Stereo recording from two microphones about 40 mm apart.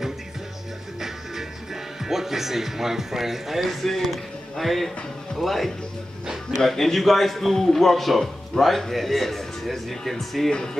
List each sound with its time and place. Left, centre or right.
2.0 s a man's voice: centre
10.5 s speech: centre